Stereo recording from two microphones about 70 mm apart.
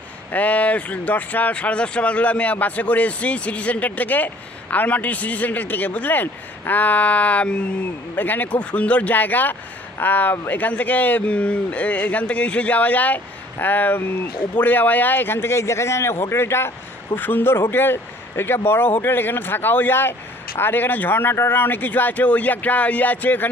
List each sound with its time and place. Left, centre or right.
0.3 s a man's voice: left